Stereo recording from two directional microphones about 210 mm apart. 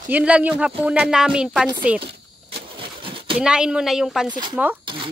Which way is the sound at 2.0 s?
50° right (ahead or behind).